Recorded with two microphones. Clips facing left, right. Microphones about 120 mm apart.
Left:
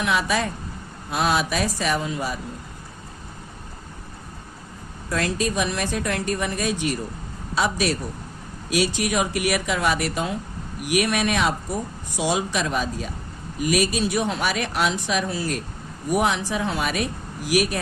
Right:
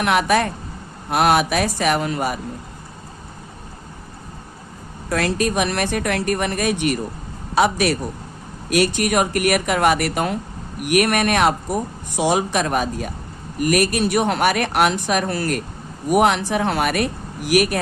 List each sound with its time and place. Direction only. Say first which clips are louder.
0.0 s speech: right 5 dB; 65° right (ahead or behind)
5.0 s a man's voice: right 4 dB; 65° right (ahead or behind)